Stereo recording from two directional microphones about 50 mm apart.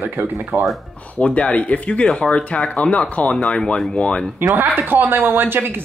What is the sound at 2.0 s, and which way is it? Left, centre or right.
Speech, centre.